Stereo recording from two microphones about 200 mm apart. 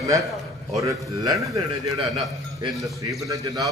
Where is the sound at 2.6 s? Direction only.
15° right (ahead or behind).